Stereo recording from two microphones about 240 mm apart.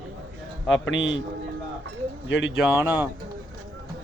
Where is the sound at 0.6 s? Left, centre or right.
Left.